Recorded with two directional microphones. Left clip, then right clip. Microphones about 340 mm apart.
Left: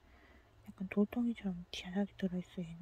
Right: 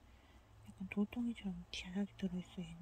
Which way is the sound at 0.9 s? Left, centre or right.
Centre.